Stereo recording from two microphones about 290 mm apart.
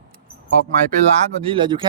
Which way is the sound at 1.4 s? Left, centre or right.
Centre.